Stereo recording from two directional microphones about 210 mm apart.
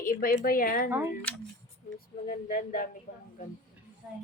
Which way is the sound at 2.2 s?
40° left (ahead or behind).